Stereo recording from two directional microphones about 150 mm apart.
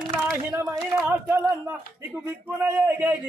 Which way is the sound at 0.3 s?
15° right (ahead or behind).